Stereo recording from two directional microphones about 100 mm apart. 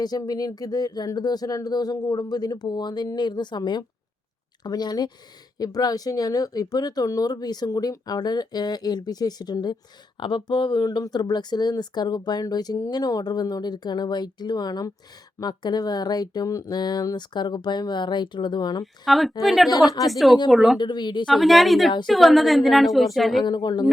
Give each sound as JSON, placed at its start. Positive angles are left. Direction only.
{"t": 0.0, "sound": "speech", "side_deg": 40}
{"t": 19.0, "sound": "a woman's voice", "side_deg": 0}
{"t": 20.7, "sound": "speech", "side_deg": 50}
{"t": 21.2, "sound": "a woman's voice", "side_deg": 0}
{"t": 23.4, "sound": "speech", "side_deg": 45}